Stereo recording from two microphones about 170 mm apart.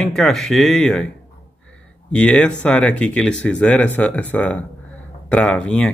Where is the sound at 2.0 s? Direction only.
5° left (ahead or behind).